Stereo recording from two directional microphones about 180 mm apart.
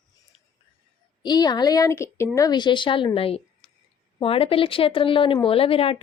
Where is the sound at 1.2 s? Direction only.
25° left (ahead or behind).